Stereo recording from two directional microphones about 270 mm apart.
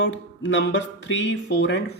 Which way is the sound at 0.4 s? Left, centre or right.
Left.